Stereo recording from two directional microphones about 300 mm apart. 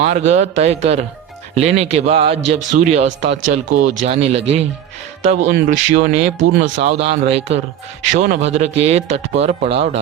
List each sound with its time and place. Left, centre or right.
0.0 s speech: right
5.4 s speech: right